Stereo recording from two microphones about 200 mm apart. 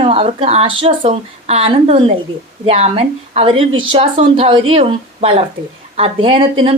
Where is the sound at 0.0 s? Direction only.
30° right (ahead or behind).